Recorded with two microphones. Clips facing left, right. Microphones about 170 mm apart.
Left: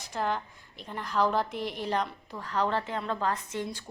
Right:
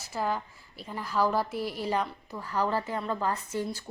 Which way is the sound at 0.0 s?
5° right (ahead or behind).